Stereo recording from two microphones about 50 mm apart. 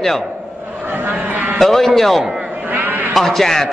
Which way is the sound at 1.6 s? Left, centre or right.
Centre.